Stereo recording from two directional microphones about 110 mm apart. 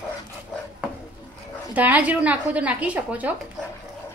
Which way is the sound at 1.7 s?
15° right (ahead or behind).